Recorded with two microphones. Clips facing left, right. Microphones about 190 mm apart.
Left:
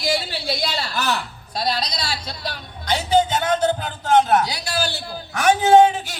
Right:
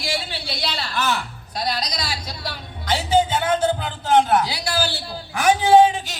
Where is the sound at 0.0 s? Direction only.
45° left (ahead or behind).